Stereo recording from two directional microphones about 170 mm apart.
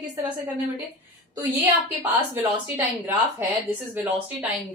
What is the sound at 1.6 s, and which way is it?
A woman's voice, 10° right (ahead or behind).